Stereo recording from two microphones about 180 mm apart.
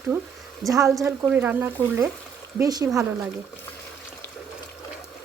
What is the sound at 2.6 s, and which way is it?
Speech, 20° right (ahead or behind).